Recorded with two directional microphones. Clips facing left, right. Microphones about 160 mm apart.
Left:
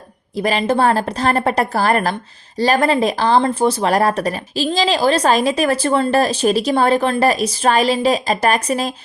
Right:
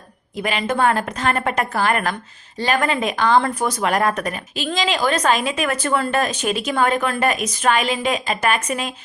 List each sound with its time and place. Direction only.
0.3 s speech: 35° left (ahead or behind)